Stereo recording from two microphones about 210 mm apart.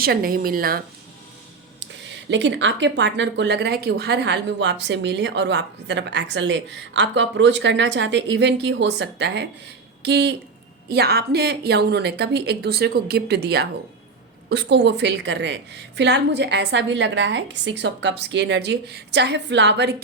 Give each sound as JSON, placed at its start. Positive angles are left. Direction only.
{"t": 0.0, "sound": "speech", "side_deg": -45}
{"t": 2.3, "sound": "speech", "side_deg": -60}